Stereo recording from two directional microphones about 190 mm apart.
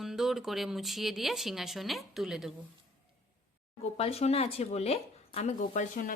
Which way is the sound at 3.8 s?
30° left (ahead or behind).